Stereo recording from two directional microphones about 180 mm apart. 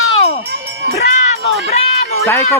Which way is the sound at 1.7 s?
35° left (ahead or behind).